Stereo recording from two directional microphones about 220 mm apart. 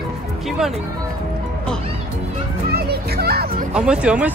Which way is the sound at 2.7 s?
45° right (ahead or behind).